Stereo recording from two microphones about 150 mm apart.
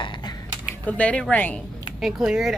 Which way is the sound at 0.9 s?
10° left (ahead or behind).